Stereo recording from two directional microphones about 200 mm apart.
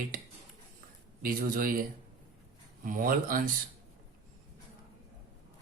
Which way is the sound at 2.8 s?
45° right (ahead or behind).